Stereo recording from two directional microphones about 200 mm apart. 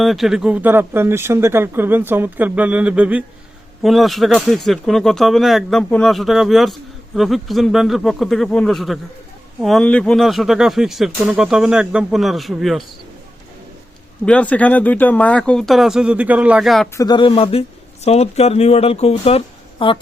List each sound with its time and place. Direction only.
0.0 s speech: centre (ahead or behind)
14.3 s speech: 5° left (ahead or behind)
16.9 s a man's voice: 20° left (ahead or behind)